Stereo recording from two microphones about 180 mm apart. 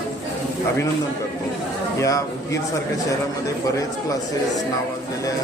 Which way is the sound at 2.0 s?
15° left (ahead or behind).